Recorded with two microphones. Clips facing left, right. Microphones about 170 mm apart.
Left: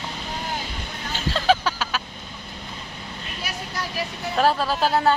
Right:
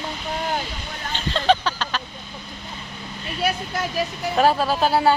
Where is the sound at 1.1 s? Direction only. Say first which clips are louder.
Right 1 dB; 5° left (ahead or behind).